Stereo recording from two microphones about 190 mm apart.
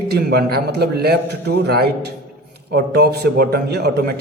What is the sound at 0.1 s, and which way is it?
A man's voice, 55° right (ahead or behind).